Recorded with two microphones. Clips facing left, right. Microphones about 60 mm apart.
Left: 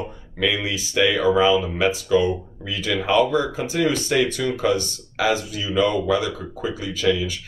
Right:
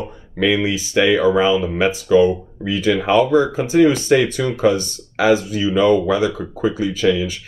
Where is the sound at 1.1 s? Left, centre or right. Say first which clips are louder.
Right 2 dB; right.